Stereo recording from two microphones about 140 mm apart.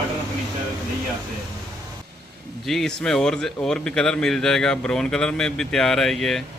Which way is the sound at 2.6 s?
5° left (ahead or behind).